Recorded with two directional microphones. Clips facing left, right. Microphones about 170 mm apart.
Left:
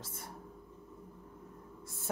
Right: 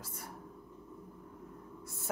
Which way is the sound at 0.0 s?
25° left (ahead or behind).